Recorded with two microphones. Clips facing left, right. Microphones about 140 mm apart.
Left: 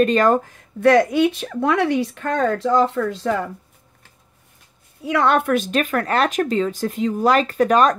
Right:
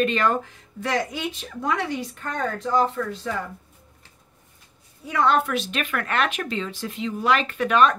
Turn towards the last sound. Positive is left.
turn(degrees=40)  # may be behind; listen again after turning